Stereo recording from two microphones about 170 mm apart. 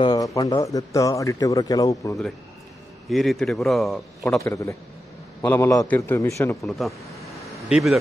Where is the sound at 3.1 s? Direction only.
Centre (ahead or behind).